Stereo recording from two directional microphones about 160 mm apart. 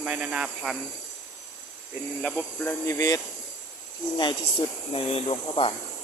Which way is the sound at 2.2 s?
5° left (ahead or behind).